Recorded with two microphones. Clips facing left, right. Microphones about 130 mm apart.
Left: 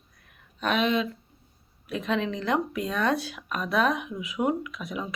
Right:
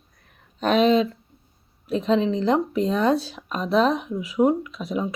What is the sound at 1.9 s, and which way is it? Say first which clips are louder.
Speech: right 7 dB; 30° right (ahead or behind).